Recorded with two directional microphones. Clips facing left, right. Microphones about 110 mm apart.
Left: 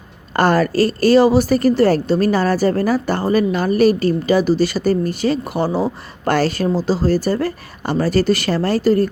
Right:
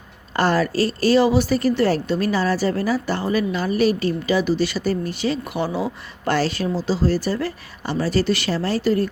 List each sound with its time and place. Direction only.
0.3 s a woman's voice: 50° left (ahead or behind)